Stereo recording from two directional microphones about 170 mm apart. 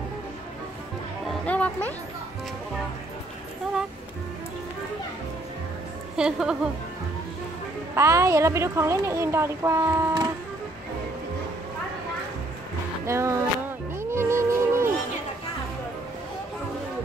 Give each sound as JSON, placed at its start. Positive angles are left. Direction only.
{"t": 1.2, "sound": "music", "side_deg": 10}
{"t": 6.1, "sound": "a woman's voice", "side_deg": -5}
{"t": 7.9, "sound": "a woman's voice", "side_deg": -15}
{"t": 13.0, "sound": "music", "side_deg": -15}